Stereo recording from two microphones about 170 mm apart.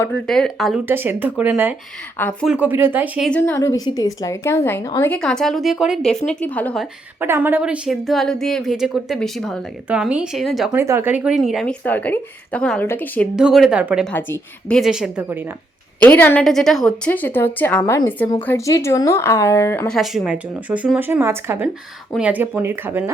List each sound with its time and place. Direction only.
0.0 s a woman's voice: 5° left (ahead or behind)
0.9 s speech: 10° right (ahead or behind)
2.1 s a woman's voice: 10° left (ahead or behind)
2.5 s speech: 10° right (ahead or behind)
3.2 s a woman's voice: 10° left (ahead or behind)
7.2 s a woman's voice: 10° right (ahead or behind)
10.7 s a woman's voice: 15° right (ahead or behind); by 13.2 s 10° left (ahead or behind)
13.3 s a woman's voice: 5° right (ahead or behind)
14.1 s a woman's voice: 10° left (ahead or behind)
14.8 s a woman's voice: centre (ahead or behind)
16.0 s a woman's voice: 10° left (ahead or behind)
19.9 s speech: centre (ahead or behind)